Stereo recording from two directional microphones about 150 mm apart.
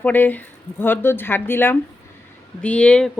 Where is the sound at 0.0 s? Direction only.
10° left (ahead or behind).